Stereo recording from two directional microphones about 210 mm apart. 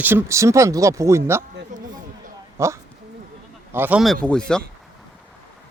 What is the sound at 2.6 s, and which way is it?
Speech, 15° right (ahead or behind).